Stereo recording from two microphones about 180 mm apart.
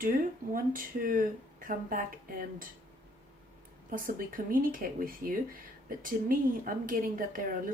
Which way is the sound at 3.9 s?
50° right (ahead or behind).